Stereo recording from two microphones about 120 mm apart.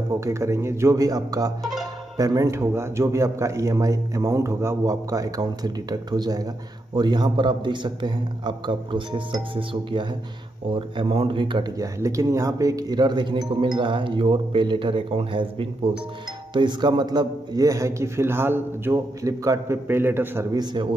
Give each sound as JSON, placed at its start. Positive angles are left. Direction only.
{"t": 0.1, "sound": "a man's voice", "side_deg": -25}
{"t": 11.8, "sound": "a man's voice", "side_deg": -25}
{"t": 20.5, "sound": "a man's voice", "side_deg": -40}